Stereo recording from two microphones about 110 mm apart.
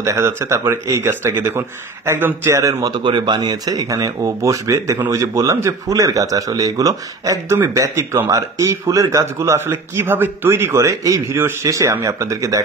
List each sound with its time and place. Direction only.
0.0 s a man's voice: 25° right (ahead or behind)
2.5 s a man's voice: 30° right (ahead or behind)